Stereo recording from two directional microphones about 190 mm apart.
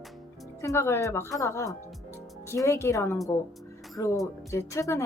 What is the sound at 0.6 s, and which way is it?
Speech, 15° left (ahead or behind).